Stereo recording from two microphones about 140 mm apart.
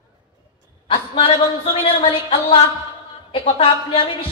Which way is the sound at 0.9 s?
35° left (ahead or behind).